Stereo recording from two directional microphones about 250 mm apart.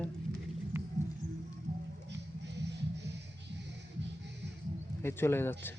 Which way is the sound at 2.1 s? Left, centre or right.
Right.